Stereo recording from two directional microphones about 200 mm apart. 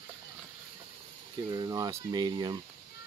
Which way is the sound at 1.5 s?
15° right (ahead or behind).